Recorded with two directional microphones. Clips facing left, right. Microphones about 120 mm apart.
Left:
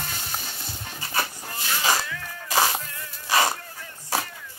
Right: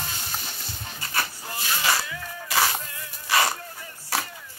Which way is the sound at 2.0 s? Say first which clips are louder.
Even; 15° right (ahead or behind).